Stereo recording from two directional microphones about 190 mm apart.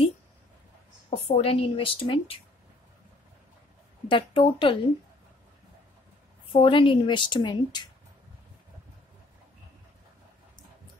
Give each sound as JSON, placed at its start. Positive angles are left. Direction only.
{"t": 1.1, "sound": "speech", "side_deg": 30}
{"t": 4.1, "sound": "speech", "side_deg": 25}
{"t": 6.5, "sound": "speech", "side_deg": 25}